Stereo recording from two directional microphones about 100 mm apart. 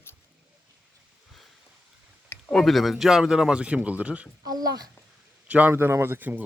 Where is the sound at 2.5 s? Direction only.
Centre (ahead or behind); by 4.3 s 15° right (ahead or behind).